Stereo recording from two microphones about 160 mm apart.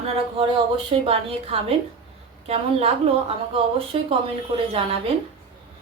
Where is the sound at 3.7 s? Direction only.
35° right (ahead or behind).